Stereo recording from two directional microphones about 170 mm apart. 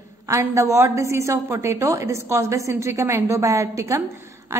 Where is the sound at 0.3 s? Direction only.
15° right (ahead or behind).